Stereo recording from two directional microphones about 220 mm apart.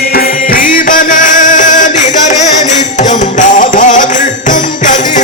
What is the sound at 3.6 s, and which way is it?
Music, 35° left (ahead or behind).